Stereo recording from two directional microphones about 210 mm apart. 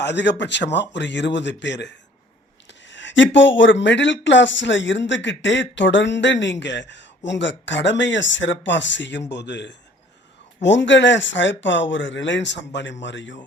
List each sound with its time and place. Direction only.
0.0 s speech: 55° left (ahead or behind)